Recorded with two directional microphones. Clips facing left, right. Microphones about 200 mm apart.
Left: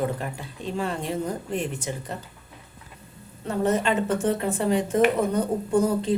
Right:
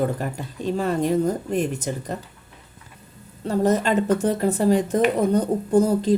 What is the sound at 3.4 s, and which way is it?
A woman's voice, 40° right (ahead or behind).